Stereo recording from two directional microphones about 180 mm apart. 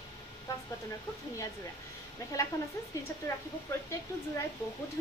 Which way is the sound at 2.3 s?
15° left (ahead or behind).